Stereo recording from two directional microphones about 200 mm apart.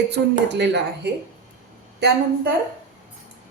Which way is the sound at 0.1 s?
55° right (ahead or behind).